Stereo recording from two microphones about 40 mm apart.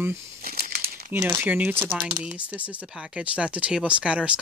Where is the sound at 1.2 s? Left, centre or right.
Right.